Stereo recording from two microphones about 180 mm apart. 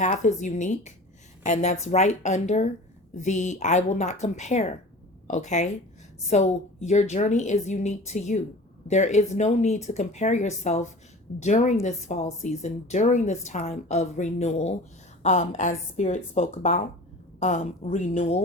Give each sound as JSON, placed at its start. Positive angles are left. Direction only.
{"t": 0.0, "sound": "a woman's voice", "side_deg": 40}